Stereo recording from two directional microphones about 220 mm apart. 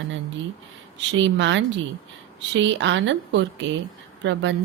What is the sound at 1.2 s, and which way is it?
Speech, 55° right (ahead or behind).